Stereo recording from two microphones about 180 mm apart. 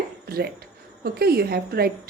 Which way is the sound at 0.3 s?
60° right (ahead or behind).